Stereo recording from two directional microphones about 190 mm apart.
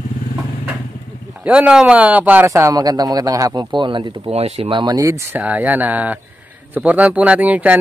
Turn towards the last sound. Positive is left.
turn(degrees=-10)  # may be behind; listen again after turning